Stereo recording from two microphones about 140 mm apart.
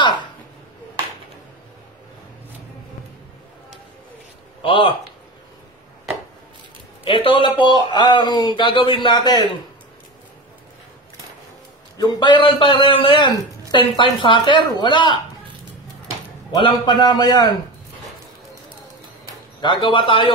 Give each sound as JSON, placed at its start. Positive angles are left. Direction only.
{"t": 4.6, "sound": "speech", "side_deg": 35}
{"t": 7.1, "sound": "a man's voice", "side_deg": 40}
{"t": 12.0, "sound": "a man's voice", "side_deg": 30}
{"t": 16.5, "sound": "a man's voice", "side_deg": 35}
{"t": 19.6, "sound": "a man's voice", "side_deg": 35}